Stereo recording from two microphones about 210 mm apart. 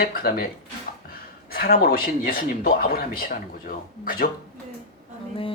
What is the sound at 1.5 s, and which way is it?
A woman's voice, 45° left (ahead or behind).